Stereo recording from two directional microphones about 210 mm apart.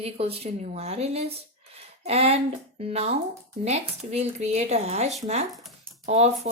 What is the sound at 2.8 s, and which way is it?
Speech, 30° right (ahead or behind).